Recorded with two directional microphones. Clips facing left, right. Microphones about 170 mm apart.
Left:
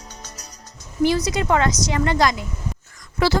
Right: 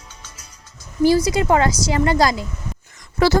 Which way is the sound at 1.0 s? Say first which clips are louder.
Right 4 dB; 30° right (ahead or behind).